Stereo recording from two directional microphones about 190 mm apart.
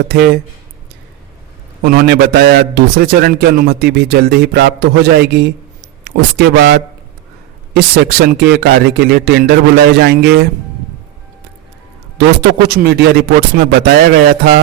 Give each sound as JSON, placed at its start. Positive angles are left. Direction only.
{"t": 0.1, "sound": "a man's voice", "side_deg": -55}
{"t": 1.8, "sound": "a man's voice", "side_deg": -55}
{"t": 12.1, "sound": "a man's voice", "side_deg": -60}